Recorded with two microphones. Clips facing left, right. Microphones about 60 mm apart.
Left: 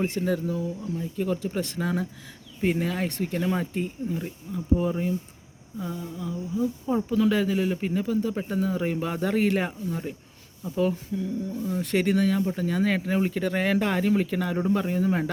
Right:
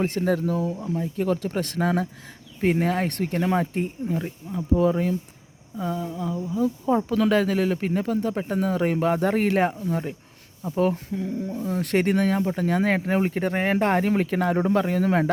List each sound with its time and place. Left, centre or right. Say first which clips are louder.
0.0 s speech: right 3 dB; right
3.4 s speech: right 5 dB; right
4.8 s speech: right 5 dB; right
5.7 s speech: right 5 dB; right
6.5 s speech: right 4 dB; right